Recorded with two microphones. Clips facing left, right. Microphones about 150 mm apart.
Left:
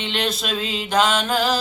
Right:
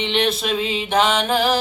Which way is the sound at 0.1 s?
20° right (ahead or behind).